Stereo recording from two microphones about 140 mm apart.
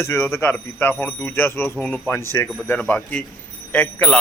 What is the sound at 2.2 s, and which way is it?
Speech, 20° left (ahead or behind).